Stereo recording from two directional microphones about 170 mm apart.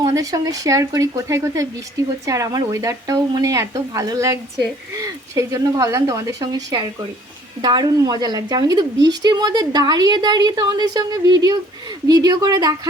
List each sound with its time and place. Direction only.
0.0 s speech: 20° right (ahead or behind)